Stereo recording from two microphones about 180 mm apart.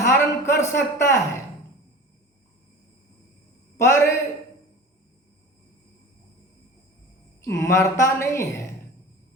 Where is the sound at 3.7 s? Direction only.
15° left (ahead or behind).